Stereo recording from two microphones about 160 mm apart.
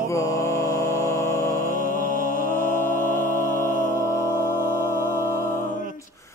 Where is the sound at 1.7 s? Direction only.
60° right (ahead or behind).